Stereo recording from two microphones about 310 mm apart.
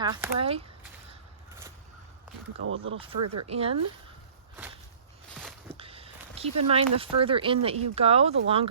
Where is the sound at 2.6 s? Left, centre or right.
Right.